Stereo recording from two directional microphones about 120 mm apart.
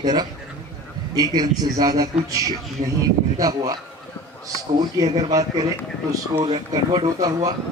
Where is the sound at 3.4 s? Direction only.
30° right (ahead or behind).